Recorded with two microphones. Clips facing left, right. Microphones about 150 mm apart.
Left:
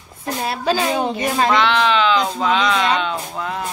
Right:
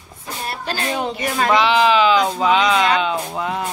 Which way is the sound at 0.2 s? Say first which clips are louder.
Left 5 dB; 90° left.